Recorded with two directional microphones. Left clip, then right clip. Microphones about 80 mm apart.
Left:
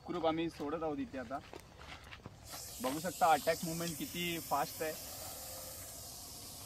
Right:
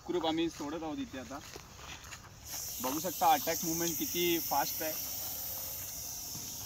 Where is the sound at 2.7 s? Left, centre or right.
Centre.